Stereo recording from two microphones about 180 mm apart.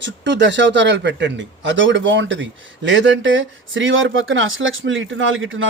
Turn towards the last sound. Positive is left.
turn(degrees=-90)